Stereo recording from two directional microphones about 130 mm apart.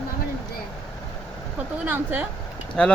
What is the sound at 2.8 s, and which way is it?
Speech, 5° left (ahead or behind).